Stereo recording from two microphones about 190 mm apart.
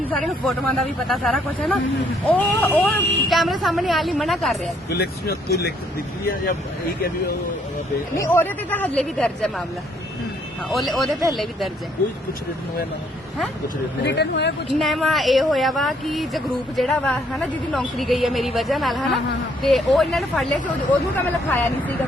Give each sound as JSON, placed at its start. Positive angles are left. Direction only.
{"t": 0.1, "sound": "speech", "side_deg": 5}
{"t": 4.9, "sound": "speech", "side_deg": 55}
{"t": 8.2, "sound": "speech", "side_deg": 10}
{"t": 10.7, "sound": "speech", "side_deg": 0}
{"t": 14.0, "sound": "speech", "side_deg": 65}
{"t": 14.7, "sound": "speech", "side_deg": 0}